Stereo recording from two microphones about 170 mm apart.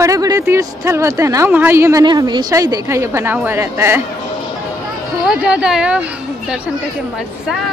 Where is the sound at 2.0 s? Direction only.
25° right (ahead or behind).